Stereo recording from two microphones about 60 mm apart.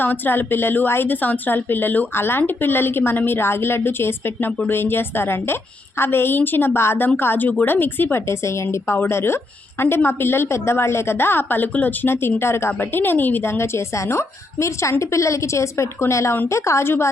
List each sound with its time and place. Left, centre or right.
0.0 s a woman's voice: left
12.0 s a woman's voice: left
12.8 s a woman's voice: left